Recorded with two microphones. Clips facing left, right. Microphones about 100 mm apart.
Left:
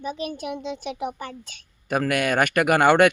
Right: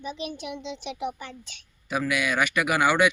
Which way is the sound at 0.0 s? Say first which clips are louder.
Left 4 dB; 45° left (ahead or behind).